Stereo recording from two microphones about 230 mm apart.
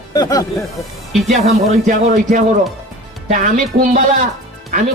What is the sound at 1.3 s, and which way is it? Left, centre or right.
Speech, right.